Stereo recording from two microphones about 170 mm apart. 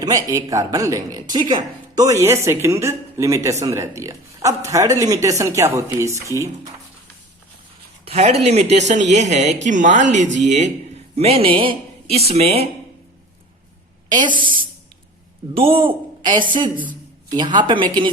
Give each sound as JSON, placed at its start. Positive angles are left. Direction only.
{"t": 0.0, "sound": "a woman's voice", "side_deg": -20}
{"t": 8.0, "sound": "speech", "side_deg": -35}
{"t": 14.1, "sound": "a woman's voice", "side_deg": -25}
{"t": 15.5, "sound": "a woman's voice", "side_deg": -30}